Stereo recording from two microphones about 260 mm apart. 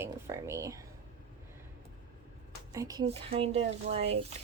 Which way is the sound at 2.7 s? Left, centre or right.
Centre.